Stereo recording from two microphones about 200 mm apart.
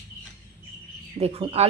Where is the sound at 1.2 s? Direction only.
30° right (ahead or behind).